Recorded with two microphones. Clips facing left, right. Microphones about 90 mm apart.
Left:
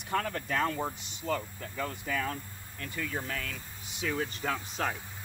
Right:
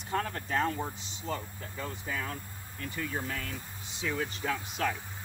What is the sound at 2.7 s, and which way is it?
Speech, 25° right (ahead or behind).